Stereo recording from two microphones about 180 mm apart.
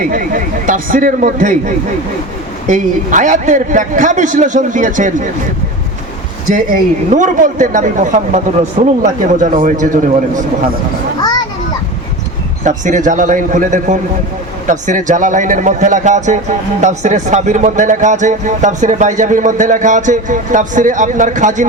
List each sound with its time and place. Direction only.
0.0 s a man's voice: 50° right (ahead or behind)
6.5 s a man's voice: 50° right (ahead or behind)
11.2 s children playing: 20° left (ahead or behind)
12.6 s a man's voice: 45° right (ahead or behind)